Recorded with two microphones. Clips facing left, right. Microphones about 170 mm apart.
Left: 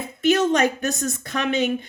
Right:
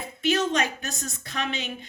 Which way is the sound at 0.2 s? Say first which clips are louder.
Left 6 dB; 50° left (ahead or behind).